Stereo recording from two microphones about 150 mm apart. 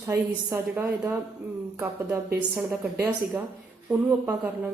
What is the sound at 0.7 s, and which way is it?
Speech, 5° right (ahead or behind).